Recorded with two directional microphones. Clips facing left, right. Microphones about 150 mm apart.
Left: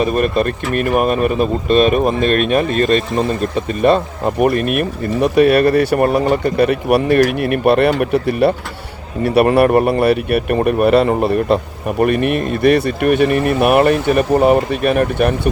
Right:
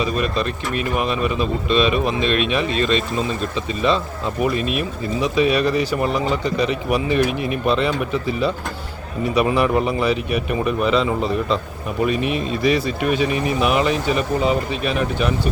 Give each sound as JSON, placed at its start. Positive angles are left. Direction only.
{"t": 0.0, "sound": "speech", "side_deg": 55}